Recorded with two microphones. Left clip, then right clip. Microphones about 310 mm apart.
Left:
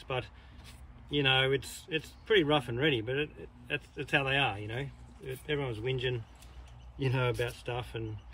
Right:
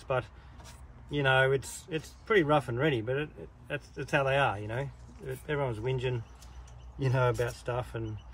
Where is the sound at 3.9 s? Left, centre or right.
Right.